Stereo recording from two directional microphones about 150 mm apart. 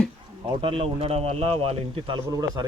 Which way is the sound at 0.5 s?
35° right (ahead or behind).